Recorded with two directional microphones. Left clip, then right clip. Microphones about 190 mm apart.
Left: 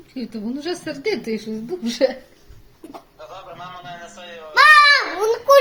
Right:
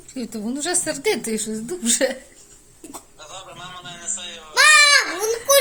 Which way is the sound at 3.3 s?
10° right (ahead or behind).